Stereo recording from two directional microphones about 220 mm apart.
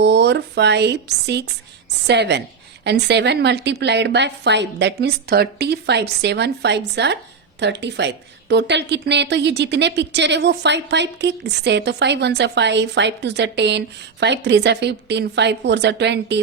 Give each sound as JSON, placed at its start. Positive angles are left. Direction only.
{"t": 0.0, "sound": "a woman's voice", "side_deg": -50}